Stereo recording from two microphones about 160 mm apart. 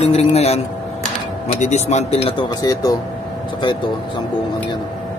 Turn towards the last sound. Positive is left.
turn(degrees=30)  # may be behind; listen again after turning